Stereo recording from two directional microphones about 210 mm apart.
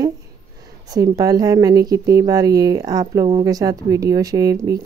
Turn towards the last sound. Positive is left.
turn(degrees=-15)  # may be behind; listen again after turning